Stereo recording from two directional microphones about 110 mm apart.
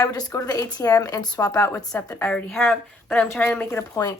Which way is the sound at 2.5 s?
5° left (ahead or behind).